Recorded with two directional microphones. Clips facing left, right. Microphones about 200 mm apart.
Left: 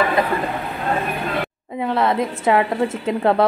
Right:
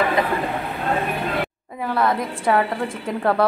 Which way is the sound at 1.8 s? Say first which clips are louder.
Left 2 dB; 25° left (ahead or behind).